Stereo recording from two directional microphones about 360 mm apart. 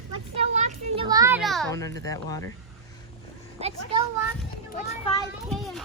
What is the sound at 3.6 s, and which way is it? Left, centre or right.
Speech, centre.